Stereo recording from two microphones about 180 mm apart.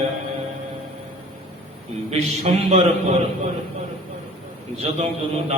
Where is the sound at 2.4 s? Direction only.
35° right (ahead or behind).